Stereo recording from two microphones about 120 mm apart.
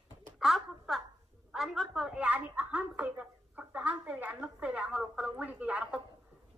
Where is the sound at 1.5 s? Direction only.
Centre (ahead or behind).